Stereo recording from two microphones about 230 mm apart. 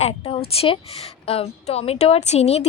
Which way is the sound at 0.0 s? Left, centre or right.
Left.